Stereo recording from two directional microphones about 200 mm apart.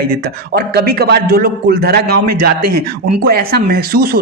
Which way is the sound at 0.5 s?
50° right (ahead or behind).